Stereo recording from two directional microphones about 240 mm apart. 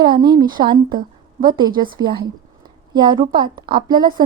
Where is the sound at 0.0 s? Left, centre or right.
Centre.